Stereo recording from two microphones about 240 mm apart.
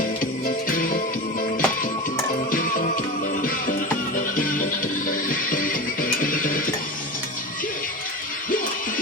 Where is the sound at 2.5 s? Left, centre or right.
Left.